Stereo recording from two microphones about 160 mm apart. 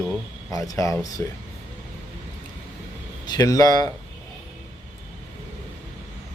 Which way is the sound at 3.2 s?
25° left (ahead or behind).